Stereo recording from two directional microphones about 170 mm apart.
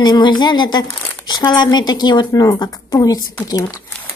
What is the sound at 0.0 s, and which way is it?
Speech, 25° left (ahead or behind).